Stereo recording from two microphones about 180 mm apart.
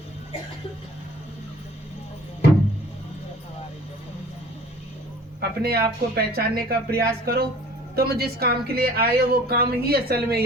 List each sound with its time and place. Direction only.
5.4 s speech: 60° right (ahead or behind)